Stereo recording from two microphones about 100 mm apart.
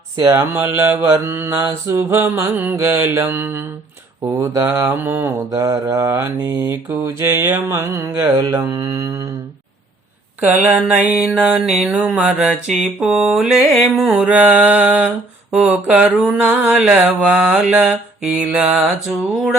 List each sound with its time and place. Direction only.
0.2 s mantra: 25° right (ahead or behind)
4.4 s speech: 30° right (ahead or behind)
4.9 s mantra: 20° right (ahead or behind)
5.5 s mantra: 30° right (ahead or behind)
8.8 s speech: 30° right (ahead or behind)
10.7 s mantra: 10° right (ahead or behind)